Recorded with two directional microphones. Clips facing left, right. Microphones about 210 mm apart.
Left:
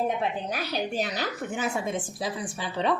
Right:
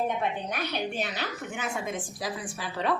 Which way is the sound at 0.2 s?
35° left (ahead or behind).